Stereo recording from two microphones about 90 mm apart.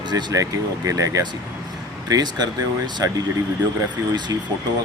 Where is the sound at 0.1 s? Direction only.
50° right (ahead or behind).